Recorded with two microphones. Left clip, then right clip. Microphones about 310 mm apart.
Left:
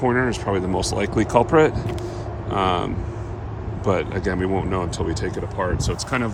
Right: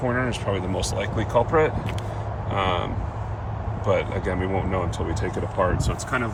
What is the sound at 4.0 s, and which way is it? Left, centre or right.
Speech, centre.